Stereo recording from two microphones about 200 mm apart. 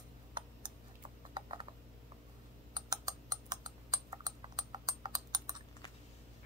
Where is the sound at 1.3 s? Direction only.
25° right (ahead or behind).